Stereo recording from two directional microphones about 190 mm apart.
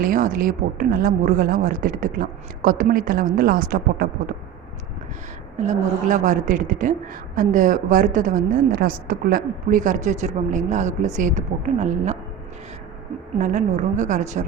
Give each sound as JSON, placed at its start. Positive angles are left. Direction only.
{"t": 0.0, "sound": "a woman's voice", "side_deg": -45}
{"t": 5.5, "sound": "a woman's voice", "side_deg": -40}
{"t": 13.4, "sound": "a woman's voice", "side_deg": -40}